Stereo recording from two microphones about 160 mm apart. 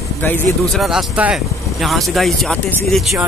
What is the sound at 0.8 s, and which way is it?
Speech, 5° right (ahead or behind).